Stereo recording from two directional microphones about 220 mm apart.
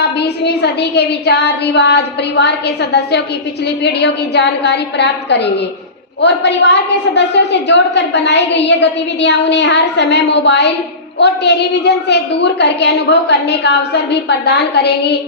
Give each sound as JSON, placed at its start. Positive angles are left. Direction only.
{"t": 0.2, "sound": "a woman's voice", "side_deg": 50}
{"t": 7.1, "sound": "a woman's voice", "side_deg": 50}